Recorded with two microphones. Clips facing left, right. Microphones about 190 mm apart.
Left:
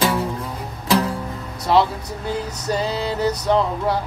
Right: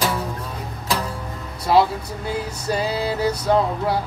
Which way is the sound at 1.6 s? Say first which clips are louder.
Right 1 dB; 10° right (ahead or behind).